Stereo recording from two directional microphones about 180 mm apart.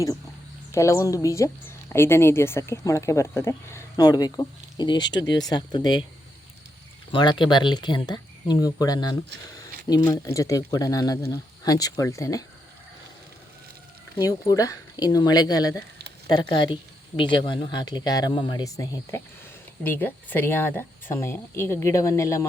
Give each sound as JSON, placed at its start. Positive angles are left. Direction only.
{"t": 0.7, "sound": "a woman's voice", "side_deg": 15}
{"t": 7.1, "sound": "speech", "side_deg": 25}
{"t": 14.2, "sound": "a woman's voice", "side_deg": 20}